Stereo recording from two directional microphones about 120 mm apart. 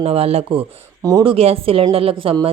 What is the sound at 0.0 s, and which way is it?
A woman's voice, 55° right (ahead or behind).